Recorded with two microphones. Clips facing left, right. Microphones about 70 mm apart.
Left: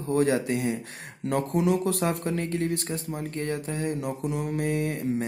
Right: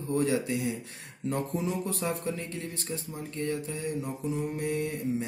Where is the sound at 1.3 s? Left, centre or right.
Left.